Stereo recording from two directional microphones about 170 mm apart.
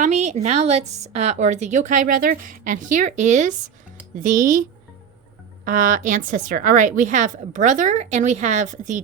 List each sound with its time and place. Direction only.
0.0 s a woman's voice: 40° right (ahead or behind)
5.6 s a woman's voice: 50° right (ahead or behind)